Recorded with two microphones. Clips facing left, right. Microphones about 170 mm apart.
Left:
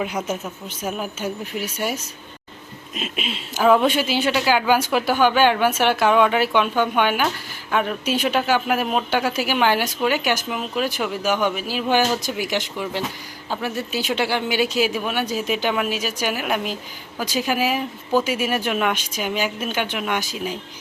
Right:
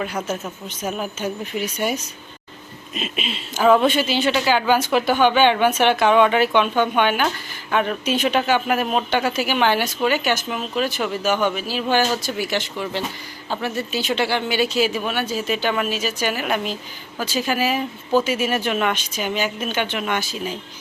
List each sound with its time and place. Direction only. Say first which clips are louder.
0.0 s speech: even; 15° left (ahead or behind)